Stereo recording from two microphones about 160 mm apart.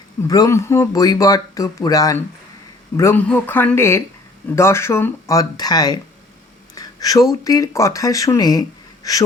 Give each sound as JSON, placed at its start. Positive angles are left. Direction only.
{"t": 0.2, "sound": "speech", "side_deg": 20}
{"t": 6.7, "sound": "a sound", "side_deg": 20}
{"t": 7.4, "sound": "speech", "side_deg": 20}